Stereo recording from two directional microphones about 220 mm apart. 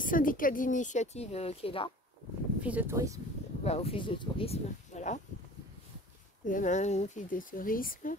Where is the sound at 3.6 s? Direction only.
25° left (ahead or behind).